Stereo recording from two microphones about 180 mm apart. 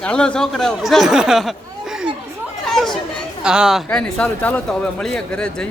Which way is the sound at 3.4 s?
5° right (ahead or behind).